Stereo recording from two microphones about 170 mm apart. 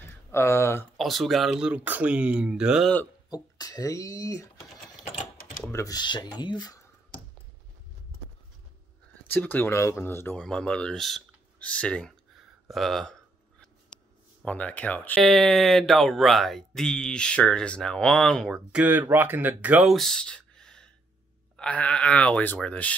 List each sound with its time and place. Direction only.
0.3 s speech: 15° left (ahead or behind)
0.9 s speech: centre (ahead or behind)
3.3 s speech: 20° left (ahead or behind)
5.7 s speech: 20° left (ahead or behind)
9.3 s speech: 10° left (ahead or behind)
14.4 s speech: 10° left (ahead or behind)